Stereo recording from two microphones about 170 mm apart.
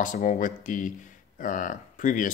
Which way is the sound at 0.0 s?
50° left (ahead or behind).